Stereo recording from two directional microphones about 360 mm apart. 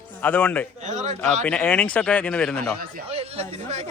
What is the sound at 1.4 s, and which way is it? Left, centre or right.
Speech, centre.